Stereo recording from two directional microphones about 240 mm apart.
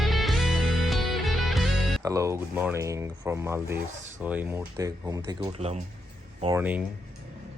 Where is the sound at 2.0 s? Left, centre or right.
Centre.